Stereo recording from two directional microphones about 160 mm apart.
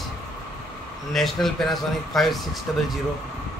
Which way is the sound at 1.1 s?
Centre (ahead or behind).